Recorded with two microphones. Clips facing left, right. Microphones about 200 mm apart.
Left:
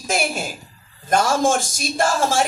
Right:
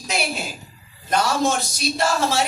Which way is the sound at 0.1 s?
45° left (ahead or behind).